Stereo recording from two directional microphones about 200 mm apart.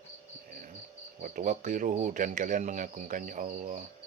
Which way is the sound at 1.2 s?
40° right (ahead or behind).